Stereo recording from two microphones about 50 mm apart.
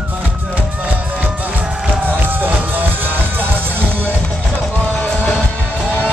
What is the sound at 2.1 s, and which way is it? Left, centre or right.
Music, right.